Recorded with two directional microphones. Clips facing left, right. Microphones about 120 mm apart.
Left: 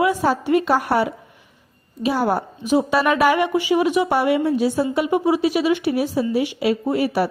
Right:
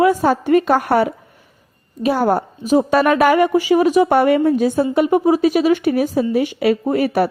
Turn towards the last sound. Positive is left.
turn(degrees=-50)  # may be behind; listen again after turning